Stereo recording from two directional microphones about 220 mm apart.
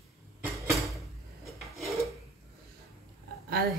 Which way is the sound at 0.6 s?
Centre (ahead or behind).